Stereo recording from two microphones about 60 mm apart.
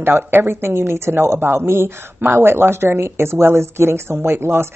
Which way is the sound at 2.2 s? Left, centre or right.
Right.